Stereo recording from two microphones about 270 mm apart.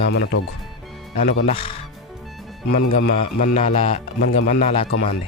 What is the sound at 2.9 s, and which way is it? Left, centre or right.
Speech, left.